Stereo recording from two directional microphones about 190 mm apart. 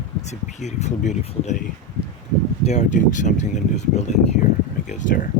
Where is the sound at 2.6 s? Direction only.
40° left (ahead or behind).